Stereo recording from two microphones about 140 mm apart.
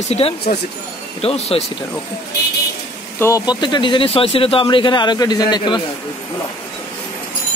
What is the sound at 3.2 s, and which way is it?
Speech, 25° left (ahead or behind).